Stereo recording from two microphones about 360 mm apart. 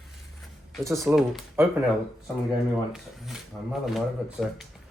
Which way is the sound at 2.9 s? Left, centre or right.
Centre.